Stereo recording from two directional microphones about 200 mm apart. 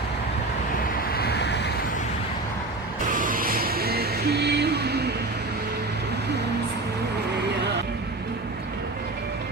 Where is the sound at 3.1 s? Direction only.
45° right (ahead or behind).